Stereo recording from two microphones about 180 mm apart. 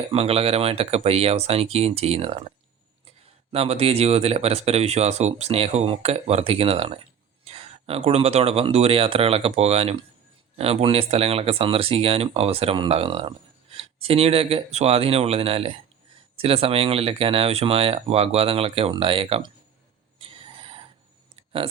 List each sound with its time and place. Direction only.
0.1 s speech: 35° right (ahead or behind)
3.5 s speech: 35° right (ahead or behind)
20.1 s a sound: 30° right (ahead or behind)